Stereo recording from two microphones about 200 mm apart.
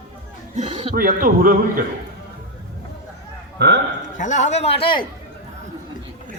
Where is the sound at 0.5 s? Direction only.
30° right (ahead or behind).